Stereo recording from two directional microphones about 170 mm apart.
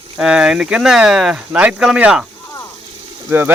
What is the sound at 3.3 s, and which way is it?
Speech, 15° right (ahead or behind).